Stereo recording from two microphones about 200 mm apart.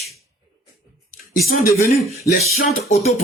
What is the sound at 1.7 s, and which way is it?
Speech, 50° left (ahead or behind).